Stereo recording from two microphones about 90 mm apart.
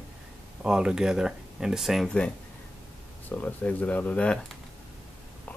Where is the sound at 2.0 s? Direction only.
10° left (ahead or behind).